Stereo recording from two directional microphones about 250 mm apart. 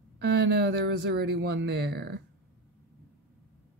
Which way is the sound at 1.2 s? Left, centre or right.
Right.